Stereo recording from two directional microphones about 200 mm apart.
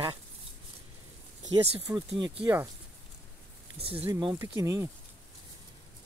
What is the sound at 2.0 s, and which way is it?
Speech, 25° right (ahead or behind).